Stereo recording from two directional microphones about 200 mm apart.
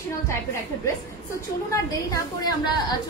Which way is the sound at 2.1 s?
20° left (ahead or behind).